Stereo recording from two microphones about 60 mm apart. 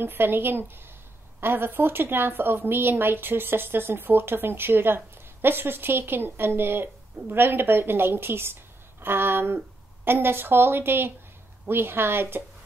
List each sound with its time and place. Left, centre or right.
0.0 s speech: right